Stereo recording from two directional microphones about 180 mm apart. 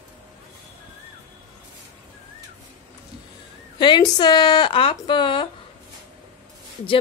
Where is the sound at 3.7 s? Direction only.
25° left (ahead or behind).